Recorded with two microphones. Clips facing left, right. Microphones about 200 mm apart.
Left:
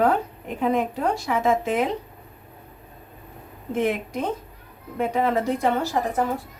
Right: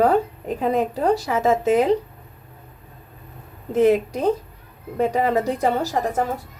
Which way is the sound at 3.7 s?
40° right (ahead or behind).